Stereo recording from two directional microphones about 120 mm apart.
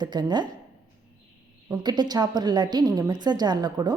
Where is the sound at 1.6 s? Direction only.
35° right (ahead or behind).